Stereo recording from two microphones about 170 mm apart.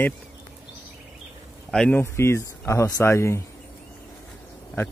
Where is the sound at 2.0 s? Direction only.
15° left (ahead or behind).